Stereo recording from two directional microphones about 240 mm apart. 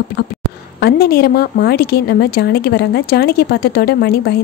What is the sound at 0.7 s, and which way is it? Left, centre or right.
A woman's voice, left.